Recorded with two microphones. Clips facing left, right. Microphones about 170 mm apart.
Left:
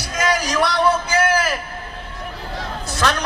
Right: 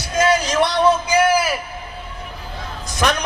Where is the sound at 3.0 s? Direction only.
15° right (ahead or behind).